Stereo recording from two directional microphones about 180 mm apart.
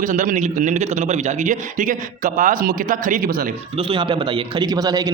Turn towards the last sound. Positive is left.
turn(degrees=-20)  # may be behind; listen again after turning